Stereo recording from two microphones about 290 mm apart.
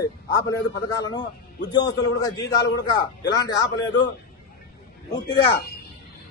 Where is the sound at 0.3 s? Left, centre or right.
Centre.